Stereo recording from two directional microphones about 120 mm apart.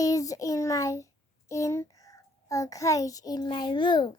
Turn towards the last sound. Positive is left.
turn(degrees=45)  # may be behind; listen again after turning